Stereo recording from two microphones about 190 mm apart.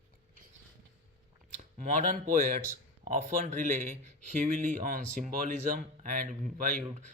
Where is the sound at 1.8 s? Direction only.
40° right (ahead or behind).